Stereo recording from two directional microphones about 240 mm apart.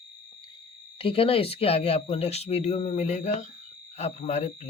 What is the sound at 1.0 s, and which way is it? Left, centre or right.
Speech, left.